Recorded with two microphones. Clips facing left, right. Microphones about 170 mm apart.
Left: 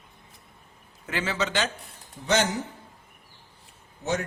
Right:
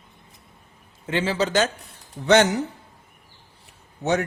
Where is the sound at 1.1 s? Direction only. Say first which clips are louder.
Right 6 dB; 30° right (ahead or behind).